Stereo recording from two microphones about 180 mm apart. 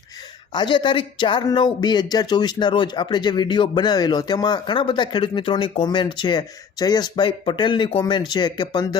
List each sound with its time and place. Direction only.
0.5 s speech: 25° left (ahead or behind)